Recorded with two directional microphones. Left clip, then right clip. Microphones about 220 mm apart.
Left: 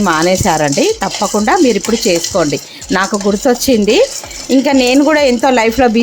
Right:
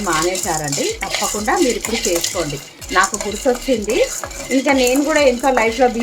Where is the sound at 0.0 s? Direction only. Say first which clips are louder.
Left 7 dB; 45° left (ahead or behind).